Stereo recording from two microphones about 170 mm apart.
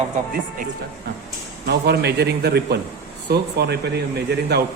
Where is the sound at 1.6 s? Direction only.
75° right (ahead or behind).